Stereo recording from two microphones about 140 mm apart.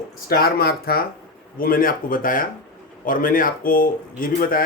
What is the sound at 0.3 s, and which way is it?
A man's voice, 90° left.